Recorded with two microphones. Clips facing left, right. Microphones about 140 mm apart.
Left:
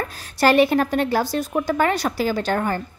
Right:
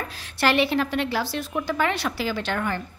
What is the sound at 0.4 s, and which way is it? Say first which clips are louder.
Speech: left 5 dB; 45° left (ahead or behind).